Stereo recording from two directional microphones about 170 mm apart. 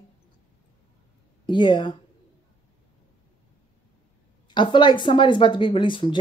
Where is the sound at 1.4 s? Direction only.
30° left (ahead or behind).